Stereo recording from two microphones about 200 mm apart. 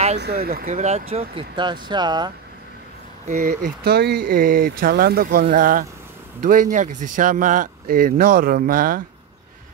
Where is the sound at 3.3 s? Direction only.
40° right (ahead or behind).